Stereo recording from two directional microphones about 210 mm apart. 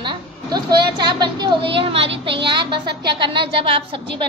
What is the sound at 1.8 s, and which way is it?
A woman's voice, 25° right (ahead or behind).